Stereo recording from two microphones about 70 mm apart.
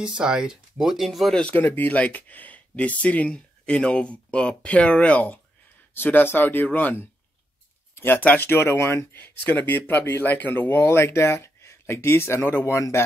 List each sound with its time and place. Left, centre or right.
0.0 s speech: centre
1.5 s speech: left
7.9 s a sound: left
8.2 s speech: left
12.4 s speech: left
12.7 s speech: left